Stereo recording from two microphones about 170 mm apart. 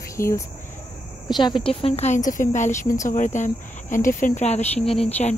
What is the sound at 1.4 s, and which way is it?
Speech, 25° left (ahead or behind).